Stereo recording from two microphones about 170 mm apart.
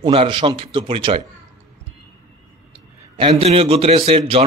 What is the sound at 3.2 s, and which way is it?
Speech, 35° right (ahead or behind).